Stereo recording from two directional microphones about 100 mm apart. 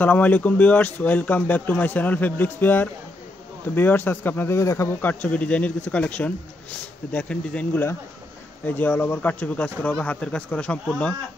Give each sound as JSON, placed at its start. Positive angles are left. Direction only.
{"t": 0.0, "sound": "a man's voice", "side_deg": 15}